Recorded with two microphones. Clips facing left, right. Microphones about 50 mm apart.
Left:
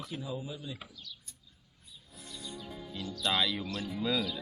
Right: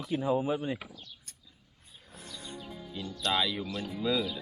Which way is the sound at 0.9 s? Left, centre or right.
Right.